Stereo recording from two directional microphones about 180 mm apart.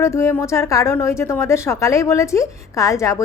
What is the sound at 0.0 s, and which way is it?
A woman's voice, 15° left (ahead or behind).